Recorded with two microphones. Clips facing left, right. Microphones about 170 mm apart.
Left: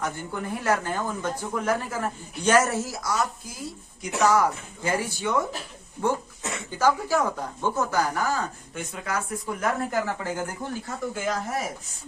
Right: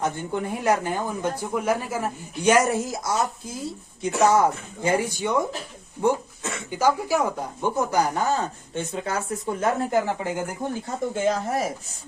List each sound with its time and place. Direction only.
0.0 s speech: 20° right (ahead or behind)
6.7 s speech: 10° right (ahead or behind)